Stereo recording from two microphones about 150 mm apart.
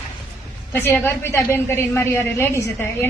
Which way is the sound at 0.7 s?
15° left (ahead or behind).